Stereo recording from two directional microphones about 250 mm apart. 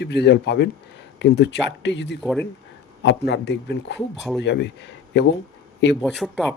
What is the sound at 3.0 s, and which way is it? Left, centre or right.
Speech, left.